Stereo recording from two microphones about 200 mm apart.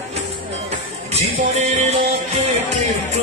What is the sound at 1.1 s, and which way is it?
Music, 35° right (ahead or behind).